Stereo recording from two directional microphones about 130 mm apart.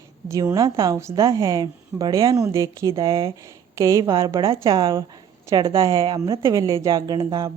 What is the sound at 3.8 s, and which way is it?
Speech, 25° right (ahead or behind).